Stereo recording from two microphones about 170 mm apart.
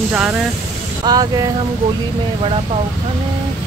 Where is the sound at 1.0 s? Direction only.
25° right (ahead or behind).